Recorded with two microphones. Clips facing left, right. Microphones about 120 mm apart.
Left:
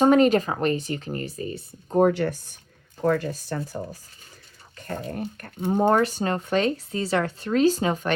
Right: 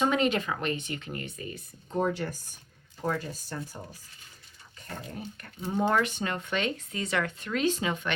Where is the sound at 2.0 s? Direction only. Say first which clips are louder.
Left 9 dB; 65° left (ahead or behind); by 3.8 s 80° left.